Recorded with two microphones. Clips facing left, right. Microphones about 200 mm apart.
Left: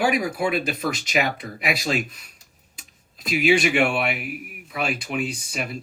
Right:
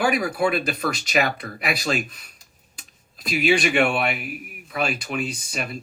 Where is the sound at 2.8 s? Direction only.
20° left (ahead or behind).